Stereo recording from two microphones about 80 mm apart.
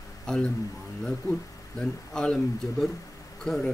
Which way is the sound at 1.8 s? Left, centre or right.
Centre.